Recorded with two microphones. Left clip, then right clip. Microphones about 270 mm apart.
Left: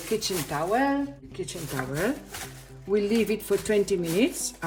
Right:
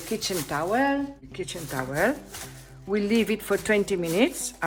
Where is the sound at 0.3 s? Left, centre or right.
Centre.